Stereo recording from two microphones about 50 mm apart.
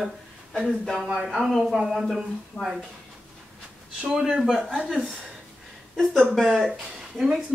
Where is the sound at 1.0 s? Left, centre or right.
Centre.